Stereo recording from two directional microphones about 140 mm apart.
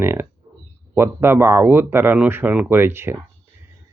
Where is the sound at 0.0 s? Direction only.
15° right (ahead or behind).